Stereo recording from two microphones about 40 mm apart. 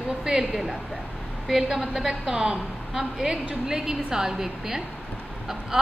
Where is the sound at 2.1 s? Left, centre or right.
Centre.